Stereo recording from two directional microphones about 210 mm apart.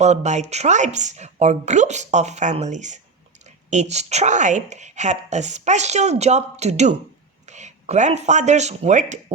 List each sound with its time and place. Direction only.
0.0 s a woman's voice: 35° right (ahead or behind)